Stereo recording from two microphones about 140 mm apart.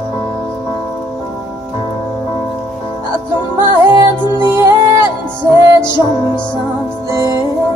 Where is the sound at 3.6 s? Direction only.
20° right (ahead or behind).